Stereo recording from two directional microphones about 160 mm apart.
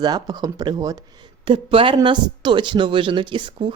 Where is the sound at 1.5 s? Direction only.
35° right (ahead or behind).